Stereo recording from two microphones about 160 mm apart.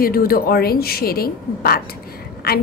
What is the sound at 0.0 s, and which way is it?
A woman's voice, 65° left (ahead or behind).